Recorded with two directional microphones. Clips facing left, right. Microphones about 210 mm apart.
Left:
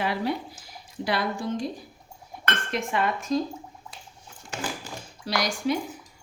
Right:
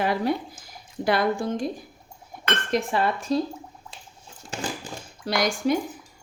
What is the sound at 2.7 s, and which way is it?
Speech, 35° right (ahead or behind).